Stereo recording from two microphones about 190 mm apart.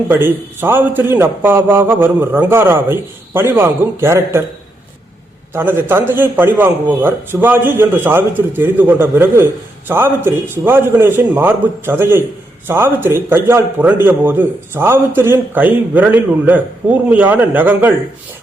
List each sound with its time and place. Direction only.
0.1 s a man's voice: 10° right (ahead or behind)
5.5 s a man's voice: 10° right (ahead or behind)